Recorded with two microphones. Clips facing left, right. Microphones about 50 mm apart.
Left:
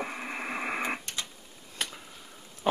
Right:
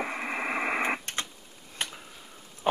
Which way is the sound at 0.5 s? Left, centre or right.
Right.